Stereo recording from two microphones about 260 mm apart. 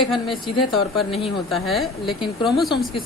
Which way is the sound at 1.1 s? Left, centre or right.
Left.